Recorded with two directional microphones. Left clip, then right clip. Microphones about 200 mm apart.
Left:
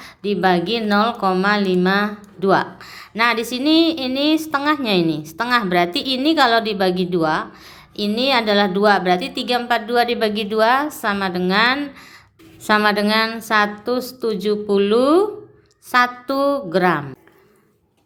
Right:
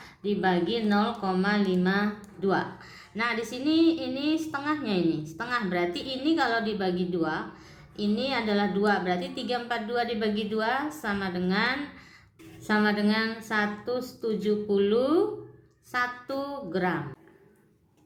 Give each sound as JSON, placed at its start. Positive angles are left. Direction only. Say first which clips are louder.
{"t": 0.0, "sound": "speech", "louder": "left 9 dB", "side_deg": 35}